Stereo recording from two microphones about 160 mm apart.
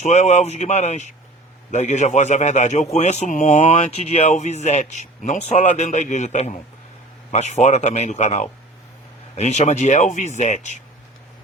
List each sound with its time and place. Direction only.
0.0 s a man's voice: 45° left (ahead or behind)